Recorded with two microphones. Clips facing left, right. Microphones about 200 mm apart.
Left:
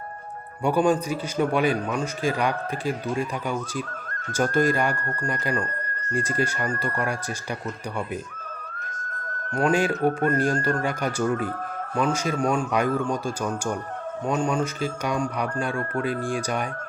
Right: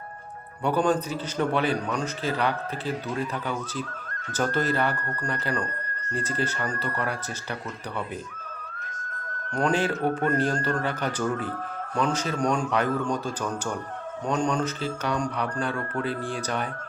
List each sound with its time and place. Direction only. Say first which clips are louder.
0.6 s a man's voice: left 2 dB; 10° left (ahead or behind)
4.4 s a man's voice: left 3 dB; 10° left (ahead or behind)
6.7 s speech: left 3 dB; 45° left (ahead or behind)
9.6 s a man's voice: left 3 dB; 10° left (ahead or behind)